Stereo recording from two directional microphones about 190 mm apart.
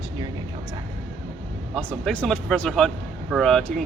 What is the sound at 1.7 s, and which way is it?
Speech, centre (ahead or behind).